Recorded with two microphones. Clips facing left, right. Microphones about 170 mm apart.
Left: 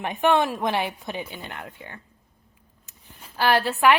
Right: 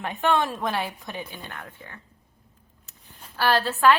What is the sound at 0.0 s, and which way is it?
A woman's voice, 15° left (ahead or behind).